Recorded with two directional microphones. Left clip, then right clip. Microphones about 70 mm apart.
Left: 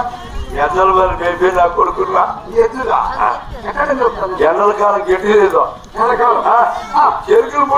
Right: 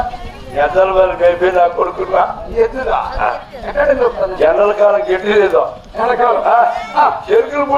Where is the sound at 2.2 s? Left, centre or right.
Left.